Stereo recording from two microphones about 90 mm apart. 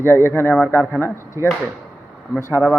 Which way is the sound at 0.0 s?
25° left (ahead or behind).